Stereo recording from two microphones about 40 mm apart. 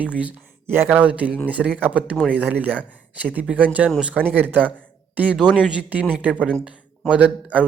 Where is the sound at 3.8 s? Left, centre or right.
Right.